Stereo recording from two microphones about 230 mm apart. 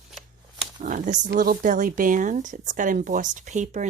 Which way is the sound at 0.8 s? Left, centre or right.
Right.